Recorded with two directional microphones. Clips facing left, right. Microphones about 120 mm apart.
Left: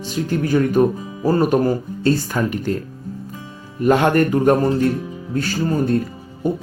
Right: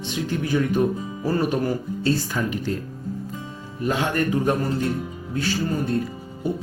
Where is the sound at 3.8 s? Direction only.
60° left (ahead or behind).